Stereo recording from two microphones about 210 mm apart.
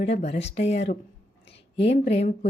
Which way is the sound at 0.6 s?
30° left (ahead or behind).